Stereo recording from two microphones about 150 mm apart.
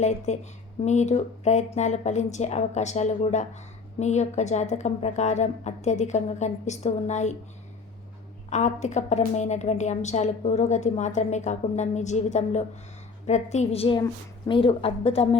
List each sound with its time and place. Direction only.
0.0 s a woman's voice: 50° left (ahead or behind)
8.4 s a woman's voice: 50° left (ahead or behind)